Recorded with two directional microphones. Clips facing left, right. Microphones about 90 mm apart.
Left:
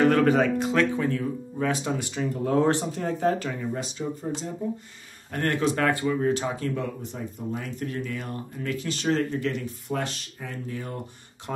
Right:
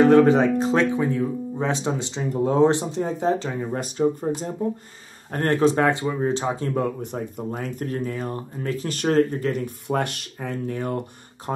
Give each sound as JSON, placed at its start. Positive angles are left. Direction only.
{"t": 0.0, "sound": "speech", "side_deg": -25}
{"t": 3.7, "sound": "speech", "side_deg": -50}
{"t": 5.3, "sound": "speech", "side_deg": -35}
{"t": 6.7, "sound": "speech", "side_deg": -50}
{"t": 8.8, "sound": "speech", "side_deg": -50}
{"t": 9.8, "sound": "speech", "side_deg": -60}
{"t": 11.5, "sound": "speech", "side_deg": -35}